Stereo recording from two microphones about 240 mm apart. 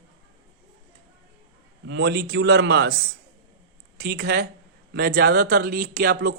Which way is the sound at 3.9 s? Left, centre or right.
Right.